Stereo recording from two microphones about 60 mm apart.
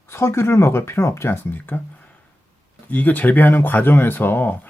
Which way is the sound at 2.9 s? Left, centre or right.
Left.